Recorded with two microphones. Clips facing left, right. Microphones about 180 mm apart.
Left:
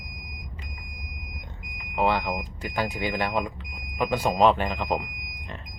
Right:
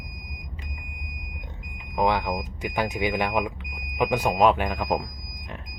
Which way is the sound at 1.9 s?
15° right (ahead or behind).